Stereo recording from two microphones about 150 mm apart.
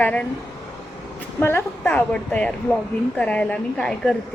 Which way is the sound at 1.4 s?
15° left (ahead or behind).